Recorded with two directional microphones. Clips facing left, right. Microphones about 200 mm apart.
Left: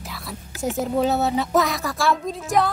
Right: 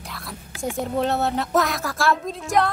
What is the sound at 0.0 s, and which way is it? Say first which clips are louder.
A child's voice: left 2 dB; centre (ahead or behind).